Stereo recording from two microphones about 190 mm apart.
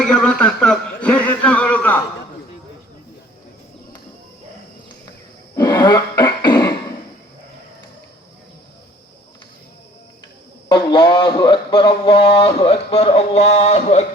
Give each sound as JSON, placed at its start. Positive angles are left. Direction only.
{"t": 0.0, "sound": "a sound", "side_deg": 5}
{"t": 5.5, "sound": "cough", "side_deg": 20}
{"t": 10.7, "sound": "speech", "side_deg": 25}